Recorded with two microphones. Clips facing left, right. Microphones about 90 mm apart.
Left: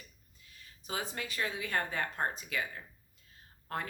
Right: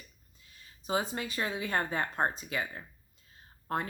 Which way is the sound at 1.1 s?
25° right (ahead or behind).